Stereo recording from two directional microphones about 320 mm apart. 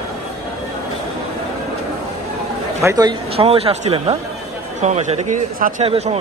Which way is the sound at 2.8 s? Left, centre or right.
Centre.